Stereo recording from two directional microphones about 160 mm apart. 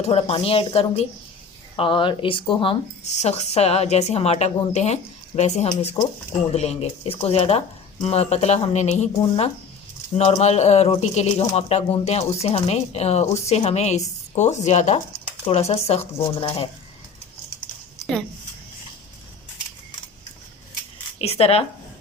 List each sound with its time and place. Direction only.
0.0 s speech: 40° left (ahead or behind)
18.0 s speech: centre (ahead or behind)
21.2 s speech: 40° left (ahead or behind)